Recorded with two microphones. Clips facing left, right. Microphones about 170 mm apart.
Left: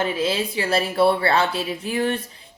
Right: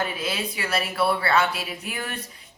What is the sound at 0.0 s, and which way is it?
A woman's voice, 30° left (ahead or behind).